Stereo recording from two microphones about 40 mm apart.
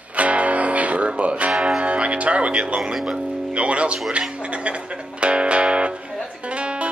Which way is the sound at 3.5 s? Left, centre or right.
Right.